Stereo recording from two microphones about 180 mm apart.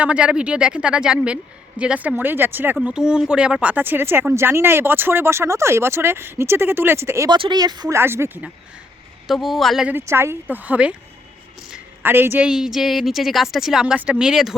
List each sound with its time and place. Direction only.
0.0 s speech: 5° right (ahead or behind)
9.2 s speech: centre (ahead or behind)